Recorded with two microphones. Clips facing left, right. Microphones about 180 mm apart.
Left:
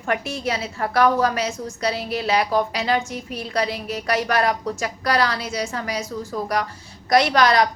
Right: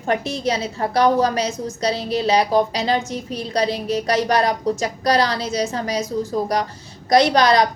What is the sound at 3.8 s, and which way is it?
A woman's voice, 20° right (ahead or behind).